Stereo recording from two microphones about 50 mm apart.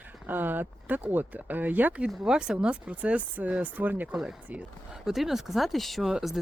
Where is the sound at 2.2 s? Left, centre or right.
Centre; by 4.2 s right.